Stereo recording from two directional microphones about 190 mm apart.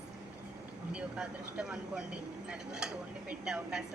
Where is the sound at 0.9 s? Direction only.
5° right (ahead or behind).